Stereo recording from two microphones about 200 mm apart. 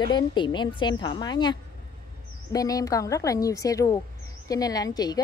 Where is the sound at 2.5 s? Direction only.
20° left (ahead or behind).